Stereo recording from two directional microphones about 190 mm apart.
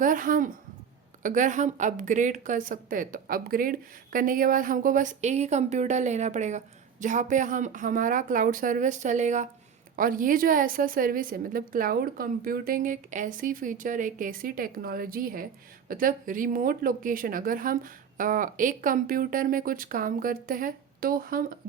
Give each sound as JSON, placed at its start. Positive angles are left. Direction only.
{"t": 0.0, "sound": "a woman's voice", "side_deg": -45}